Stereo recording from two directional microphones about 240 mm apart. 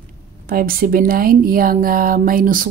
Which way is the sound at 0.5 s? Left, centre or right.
Right.